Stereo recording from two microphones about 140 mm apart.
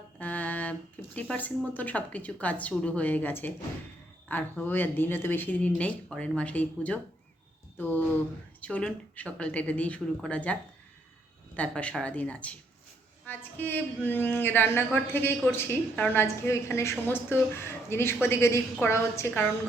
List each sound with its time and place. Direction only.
0.2 s a woman's voice: 10° left (ahead or behind)